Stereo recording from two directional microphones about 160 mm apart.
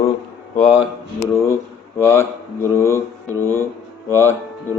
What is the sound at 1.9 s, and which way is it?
Mantra, 15° left (ahead or behind).